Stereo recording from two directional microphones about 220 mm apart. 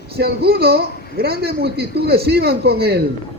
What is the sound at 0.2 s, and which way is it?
A man's voice, 45° right (ahead or behind).